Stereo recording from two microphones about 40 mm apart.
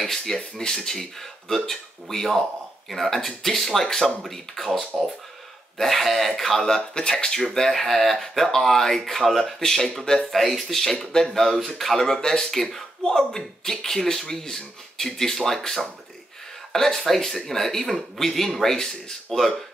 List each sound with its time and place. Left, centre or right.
0.0 s speech: centre
4.9 s speech: centre
5.8 s speech: centre
6.8 s speech: left